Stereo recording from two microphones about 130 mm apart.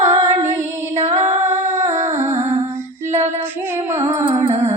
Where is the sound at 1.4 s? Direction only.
20° right (ahead or behind).